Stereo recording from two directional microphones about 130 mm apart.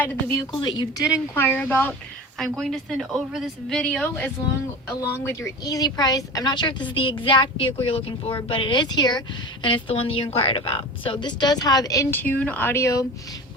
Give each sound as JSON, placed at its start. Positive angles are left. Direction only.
{"t": 0.0, "sound": "speech", "side_deg": 15}
{"t": 0.5, "sound": "speech", "side_deg": 35}
{"t": 1.4, "sound": "speech", "side_deg": 15}
{"t": 2.4, "sound": "a woman's voice", "side_deg": 0}
{"t": 4.9, "sound": "speech", "side_deg": 25}
{"t": 12.1, "sound": "speech", "side_deg": 15}